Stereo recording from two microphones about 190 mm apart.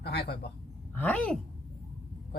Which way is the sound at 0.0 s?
60° left (ahead or behind).